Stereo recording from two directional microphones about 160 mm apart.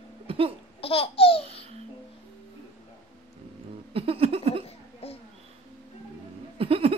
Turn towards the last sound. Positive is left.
turn(degrees=-35)  # may be behind; listen again after turning